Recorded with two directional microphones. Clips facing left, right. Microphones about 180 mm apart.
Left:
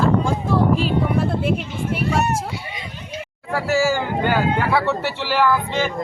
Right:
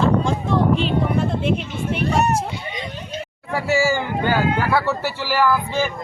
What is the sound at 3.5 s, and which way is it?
Speech, 15° right (ahead or behind).